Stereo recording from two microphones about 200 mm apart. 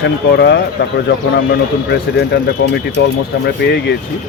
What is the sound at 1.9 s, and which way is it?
Speech, 55° left (ahead or behind).